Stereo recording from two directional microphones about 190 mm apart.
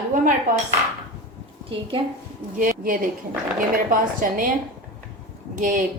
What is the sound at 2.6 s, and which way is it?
A woman's voice, 45° right (ahead or behind).